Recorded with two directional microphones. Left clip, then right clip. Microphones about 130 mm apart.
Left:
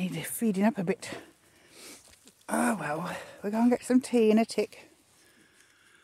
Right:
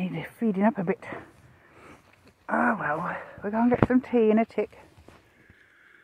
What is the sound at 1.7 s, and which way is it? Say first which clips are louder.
Speech: left 1 dB; 25° left (ahead or behind).